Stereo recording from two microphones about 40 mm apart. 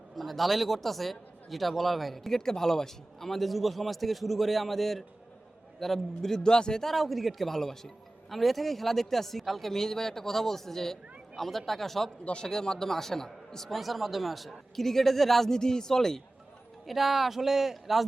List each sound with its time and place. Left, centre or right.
0.2 s a man's voice: centre
6.9 s a man's voice: centre
12.2 s speech: left
12.5 s a man's voice: centre
13.7 s a man's voice: centre
16.8 s speech: centre